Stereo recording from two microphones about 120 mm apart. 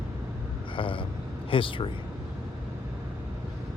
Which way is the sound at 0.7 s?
45° left (ahead or behind).